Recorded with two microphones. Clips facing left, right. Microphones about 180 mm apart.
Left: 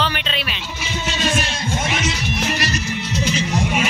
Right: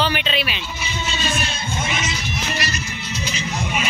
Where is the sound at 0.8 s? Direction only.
90° left; by 2.5 s 75° left (ahead or behind).